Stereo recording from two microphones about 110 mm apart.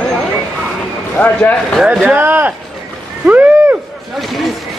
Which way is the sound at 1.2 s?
15° left (ahead or behind).